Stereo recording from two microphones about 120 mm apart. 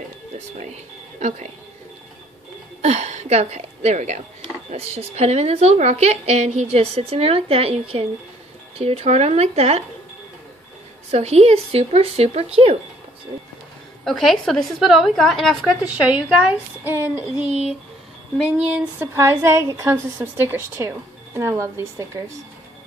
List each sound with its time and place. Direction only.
1.2 s speech: 75° right (ahead or behind)
2.8 s a woman's voice: 70° right (ahead or behind)
4.6 s a woman's voice: 60° right (ahead or behind)
11.1 s a woman's voice: 65° right (ahead or behind)
14.0 s a woman's voice: centre (ahead or behind)
15.9 s a woman's voice: 10° right (ahead or behind)
18.7 s a woman's voice: 15° right (ahead or behind)